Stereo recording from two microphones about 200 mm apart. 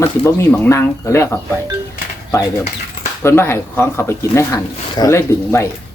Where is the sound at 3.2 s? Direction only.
10° left (ahead or behind).